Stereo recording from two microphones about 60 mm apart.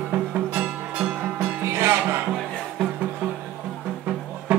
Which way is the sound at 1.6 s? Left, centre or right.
Right.